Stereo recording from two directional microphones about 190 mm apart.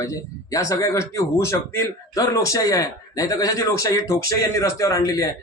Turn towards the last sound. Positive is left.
turn(degrees=20)  # may be behind; listen again after turning